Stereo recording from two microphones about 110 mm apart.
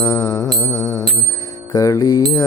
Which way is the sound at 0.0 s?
30° left (ahead or behind).